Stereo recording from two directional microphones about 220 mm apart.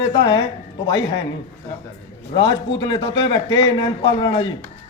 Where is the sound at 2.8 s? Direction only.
20° left (ahead or behind).